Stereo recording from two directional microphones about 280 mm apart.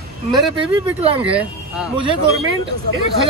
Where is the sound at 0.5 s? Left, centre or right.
Centre.